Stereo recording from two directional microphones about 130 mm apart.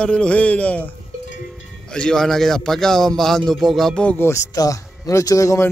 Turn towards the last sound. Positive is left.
turn(degrees=25)  # may be behind; listen again after turning